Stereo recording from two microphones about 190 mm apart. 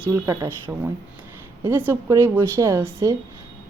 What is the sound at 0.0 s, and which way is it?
Speech, 10° right (ahead or behind).